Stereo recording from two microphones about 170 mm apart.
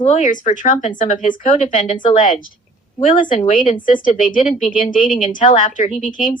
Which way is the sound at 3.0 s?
50° left (ahead or behind).